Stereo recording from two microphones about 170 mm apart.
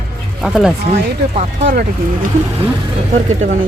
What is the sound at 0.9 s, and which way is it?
Speech, 40° right (ahead or behind).